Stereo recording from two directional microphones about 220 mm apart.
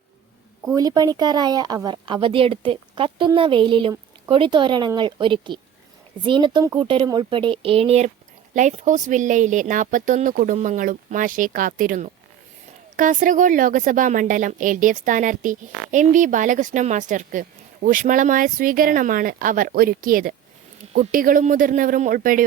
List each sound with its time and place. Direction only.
0.7 s speech: 15° right (ahead or behind); by 22.4 s 40° right (ahead or behind)